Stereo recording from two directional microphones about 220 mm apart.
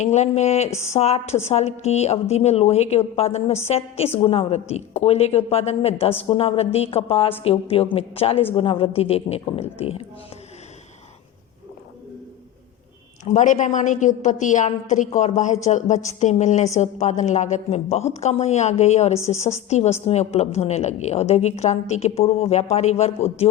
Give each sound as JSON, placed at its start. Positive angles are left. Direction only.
{"t": 0.0, "sound": "a woman's voice", "side_deg": 30}
{"t": 0.7, "sound": "speech", "side_deg": 15}
{"t": 0.9, "sound": "a woman's voice", "side_deg": 30}
{"t": 13.2, "sound": "a woman's voice", "side_deg": 35}